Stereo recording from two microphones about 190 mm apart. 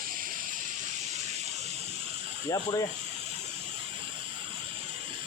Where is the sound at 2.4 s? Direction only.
20° left (ahead or behind).